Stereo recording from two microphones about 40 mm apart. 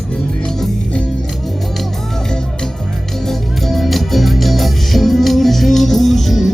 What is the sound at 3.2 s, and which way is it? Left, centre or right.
Music, centre.